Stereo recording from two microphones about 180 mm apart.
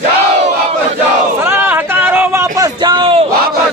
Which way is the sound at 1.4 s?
15° right (ahead or behind).